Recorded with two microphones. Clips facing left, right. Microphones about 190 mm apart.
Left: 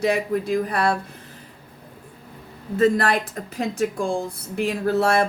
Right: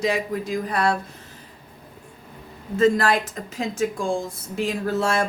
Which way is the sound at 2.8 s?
60° left (ahead or behind).